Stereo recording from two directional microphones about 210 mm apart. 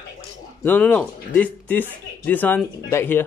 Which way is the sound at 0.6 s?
10° left (ahead or behind).